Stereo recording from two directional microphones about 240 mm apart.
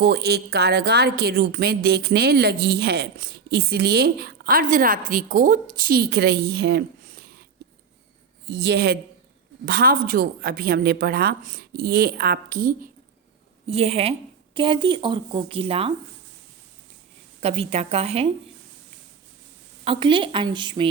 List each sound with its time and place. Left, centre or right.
0.0 s a woman's voice: right
8.4 s a woman's voice: right
17.6 s a woman's voice: right
19.8 s a woman's voice: right